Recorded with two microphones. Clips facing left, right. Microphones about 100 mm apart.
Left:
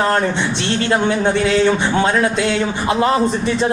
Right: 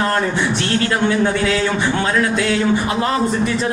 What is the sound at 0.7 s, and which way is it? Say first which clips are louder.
Speech: left 2 dB; 25° left (ahead or behind).